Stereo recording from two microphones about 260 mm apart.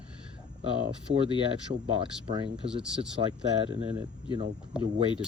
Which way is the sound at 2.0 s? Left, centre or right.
Centre.